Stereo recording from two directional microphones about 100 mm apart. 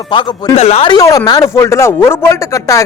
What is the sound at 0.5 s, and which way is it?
Speech, 90° left.